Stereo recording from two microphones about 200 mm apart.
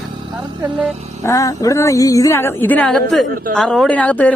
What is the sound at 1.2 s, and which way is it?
A woman's voice, 15° left (ahead or behind).